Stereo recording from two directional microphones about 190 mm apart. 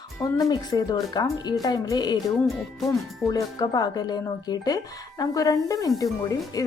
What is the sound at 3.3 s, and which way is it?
Speech, 20° left (ahead or behind).